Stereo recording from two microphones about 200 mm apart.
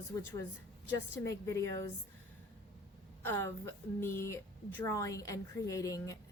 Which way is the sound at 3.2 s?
10° left (ahead or behind).